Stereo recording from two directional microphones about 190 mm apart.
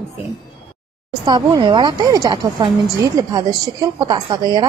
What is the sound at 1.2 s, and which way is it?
A woman's voice, 25° right (ahead or behind).